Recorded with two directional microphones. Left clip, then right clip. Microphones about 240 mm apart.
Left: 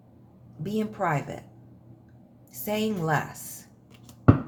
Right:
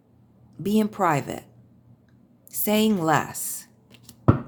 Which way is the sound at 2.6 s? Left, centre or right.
Right.